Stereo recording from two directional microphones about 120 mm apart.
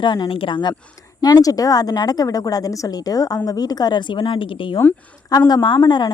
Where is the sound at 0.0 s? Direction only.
40° left (ahead or behind).